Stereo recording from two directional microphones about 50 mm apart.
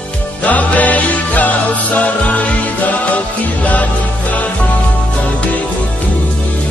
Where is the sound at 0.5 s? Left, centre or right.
Left.